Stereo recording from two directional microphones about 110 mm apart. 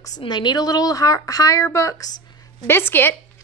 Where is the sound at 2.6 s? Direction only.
20° left (ahead or behind).